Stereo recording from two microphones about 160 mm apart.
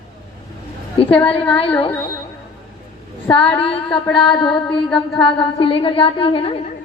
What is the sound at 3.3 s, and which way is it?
Speech, 35° left (ahead or behind).